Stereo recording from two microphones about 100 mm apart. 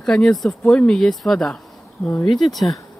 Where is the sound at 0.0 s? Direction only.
10° left (ahead or behind).